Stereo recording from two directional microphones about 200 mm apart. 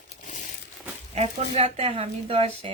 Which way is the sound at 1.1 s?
30° right (ahead or behind).